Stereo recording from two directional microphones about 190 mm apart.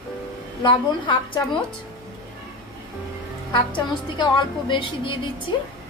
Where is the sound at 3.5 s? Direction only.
25° left (ahead or behind).